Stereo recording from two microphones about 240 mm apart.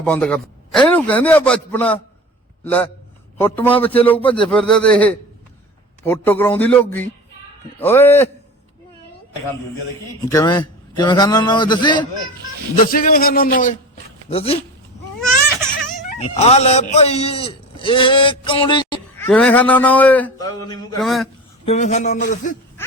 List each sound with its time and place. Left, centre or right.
0.0 s a man's voice: centre
3.3 s a man's voice: centre
10.2 s a man's voice: centre
12.8 s a man's voice: left
14.3 s a man's voice: left
15.7 s speech: left
19.3 s a man's voice: centre
21.0 s speech: centre
21.7 s a man's voice: left